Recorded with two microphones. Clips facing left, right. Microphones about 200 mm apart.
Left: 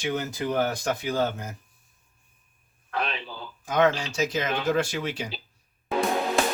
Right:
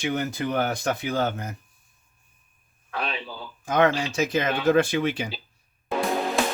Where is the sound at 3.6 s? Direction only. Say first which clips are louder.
Right 1 dB; 55° right (ahead or behind).